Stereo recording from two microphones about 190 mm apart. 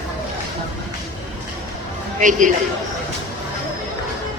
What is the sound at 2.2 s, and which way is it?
Speech, 40° right (ahead or behind).